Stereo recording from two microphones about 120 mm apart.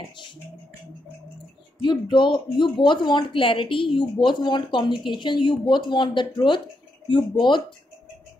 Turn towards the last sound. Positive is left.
turn(degrees=40)  # may be behind; listen again after turning